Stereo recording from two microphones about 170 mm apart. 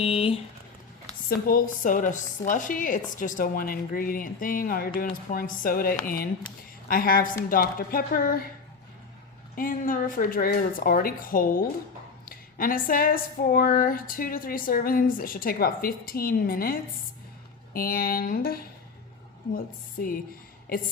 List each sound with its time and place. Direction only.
0.0 s speech: 35° left (ahead or behind)
1.3 s speech: 60° left (ahead or behind)
9.6 s speech: 55° left (ahead or behind)